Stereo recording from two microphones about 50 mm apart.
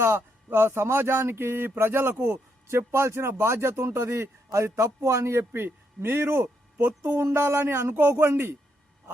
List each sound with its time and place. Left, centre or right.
0.0 s speech: right
5.5 s speech: right
6.8 s speech: right
7.3 s speech: right
8.0 s speech: right